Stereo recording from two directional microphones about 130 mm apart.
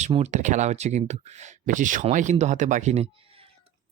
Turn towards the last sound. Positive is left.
turn(degrees=-50)  # may be behind; listen again after turning